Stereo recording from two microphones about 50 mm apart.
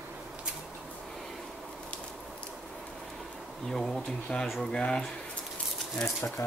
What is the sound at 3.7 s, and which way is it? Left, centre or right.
Bee, centre.